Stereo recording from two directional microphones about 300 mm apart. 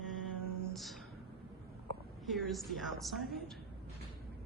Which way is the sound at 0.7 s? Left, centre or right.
Centre.